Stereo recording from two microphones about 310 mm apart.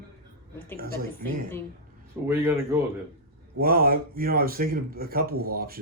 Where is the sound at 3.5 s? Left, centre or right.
Right.